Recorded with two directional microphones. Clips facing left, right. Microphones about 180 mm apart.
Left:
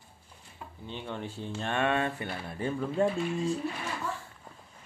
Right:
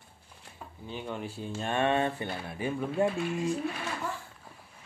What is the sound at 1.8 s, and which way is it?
Speech, 25° right (ahead or behind).